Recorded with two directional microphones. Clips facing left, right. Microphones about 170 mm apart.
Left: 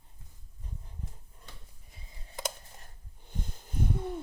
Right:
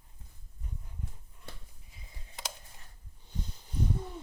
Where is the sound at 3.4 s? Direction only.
50° left (ahead or behind).